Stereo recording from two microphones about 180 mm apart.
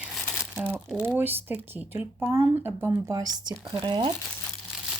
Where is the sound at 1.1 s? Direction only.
10° right (ahead or behind).